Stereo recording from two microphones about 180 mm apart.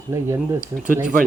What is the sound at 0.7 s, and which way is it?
Speech, 45° right (ahead or behind).